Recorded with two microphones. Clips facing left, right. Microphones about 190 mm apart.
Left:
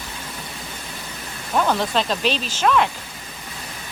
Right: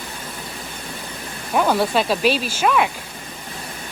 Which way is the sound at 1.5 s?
10° right (ahead or behind).